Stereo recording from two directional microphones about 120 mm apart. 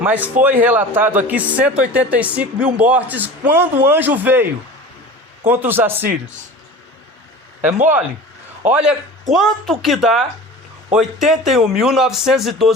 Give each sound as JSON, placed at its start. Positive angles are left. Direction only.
{"t": 0.0, "sound": "a man's voice", "side_deg": -10}
{"t": 5.5, "sound": "a man's voice", "side_deg": -15}
{"t": 8.7, "sound": "speech", "side_deg": -5}